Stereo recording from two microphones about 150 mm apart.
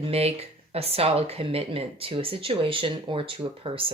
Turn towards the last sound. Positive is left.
turn(degrees=-35)  # may be behind; listen again after turning